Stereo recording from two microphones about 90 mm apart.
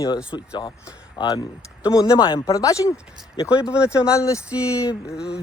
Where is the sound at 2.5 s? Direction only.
40° left (ahead or behind).